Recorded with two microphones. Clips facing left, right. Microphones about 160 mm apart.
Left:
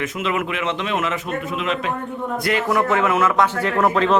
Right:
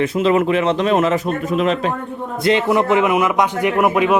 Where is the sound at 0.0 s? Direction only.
35° right (ahead or behind).